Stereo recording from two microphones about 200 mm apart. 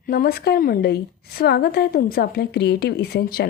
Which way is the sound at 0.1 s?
50° left (ahead or behind).